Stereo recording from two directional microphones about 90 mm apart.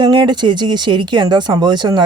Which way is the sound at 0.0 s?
55° right (ahead or behind).